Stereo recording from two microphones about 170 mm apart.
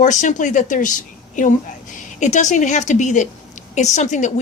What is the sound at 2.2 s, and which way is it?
A woman's voice, 45° left (ahead or behind).